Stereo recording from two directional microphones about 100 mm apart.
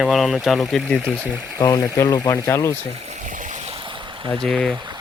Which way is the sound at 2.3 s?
25° left (ahead or behind).